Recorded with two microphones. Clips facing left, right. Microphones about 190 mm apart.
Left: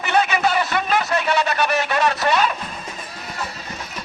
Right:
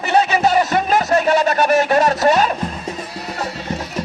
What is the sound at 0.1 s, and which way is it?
Music, 35° right (ahead or behind).